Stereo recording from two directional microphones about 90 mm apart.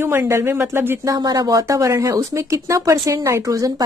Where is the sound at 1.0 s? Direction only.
45° right (ahead or behind).